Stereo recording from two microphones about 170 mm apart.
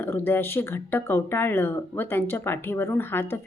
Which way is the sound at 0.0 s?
10° left (ahead or behind).